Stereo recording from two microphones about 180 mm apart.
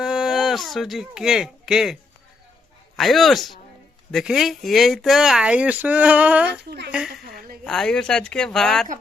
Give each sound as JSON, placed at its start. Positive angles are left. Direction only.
{"t": 0.0, "sound": "speech", "side_deg": 0}
{"t": 6.5, "sound": "speech", "side_deg": -65}
{"t": 7.3, "sound": "a sound", "side_deg": -55}
{"t": 7.6, "sound": "speech", "side_deg": 5}